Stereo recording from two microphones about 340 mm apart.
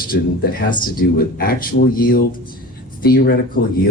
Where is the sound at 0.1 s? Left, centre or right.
Left.